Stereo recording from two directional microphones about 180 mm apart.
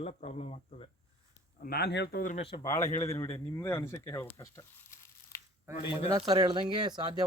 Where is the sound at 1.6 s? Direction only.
60° left (ahead or behind); by 2.4 s 45° left (ahead or behind).